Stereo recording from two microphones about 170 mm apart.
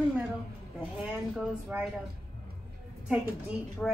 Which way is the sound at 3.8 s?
5° left (ahead or behind).